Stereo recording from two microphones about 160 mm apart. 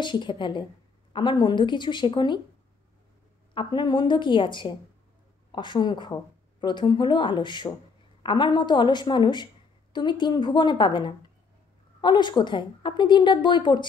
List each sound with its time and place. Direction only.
0.0 s a woman's voice: 30° left (ahead or behind)
3.5 s a woman's voice: 30° left (ahead or behind)